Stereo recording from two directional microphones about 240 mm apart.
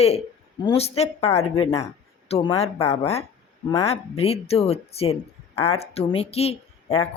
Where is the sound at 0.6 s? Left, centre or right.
Left.